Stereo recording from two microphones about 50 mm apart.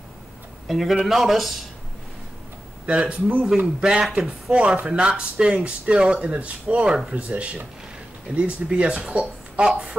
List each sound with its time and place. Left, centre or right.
0.7 s a man's voice: centre
2.9 s speech: right
3.4 s speech: centre